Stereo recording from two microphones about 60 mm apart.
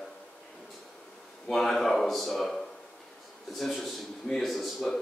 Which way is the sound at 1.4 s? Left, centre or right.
Centre.